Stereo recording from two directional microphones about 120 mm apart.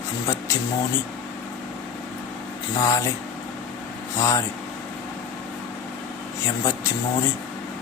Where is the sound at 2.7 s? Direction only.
25° left (ahead or behind).